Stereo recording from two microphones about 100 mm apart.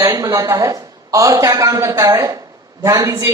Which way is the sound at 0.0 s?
35° right (ahead or behind).